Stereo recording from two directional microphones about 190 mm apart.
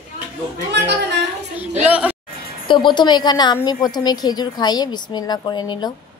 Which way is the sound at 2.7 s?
25° left (ahead or behind).